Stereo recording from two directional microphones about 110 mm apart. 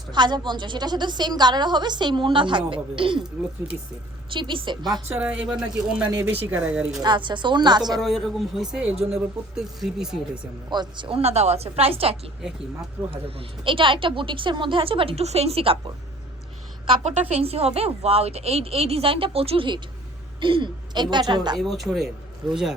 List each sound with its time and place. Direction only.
0.1 s a woman's voice: 45° right (ahead or behind)
4.3 s a woman's voice: 50° right (ahead or behind)
5.0 s speech: 10° right (ahead or behind)
7.0 s a woman's voice: 45° right (ahead or behind)
8.0 s speech: centre (ahead or behind)
10.7 s a woman's voice: 45° right (ahead or behind)
11.2 s a woman's voice: 70° right (ahead or behind)
17.0 s a woman's voice: 75° right (ahead or behind); by 21.6 s 40° right (ahead or behind)
21.6 s speech: centre (ahead or behind)